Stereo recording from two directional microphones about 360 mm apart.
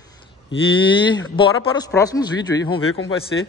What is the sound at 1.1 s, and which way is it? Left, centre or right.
Snicker, centre.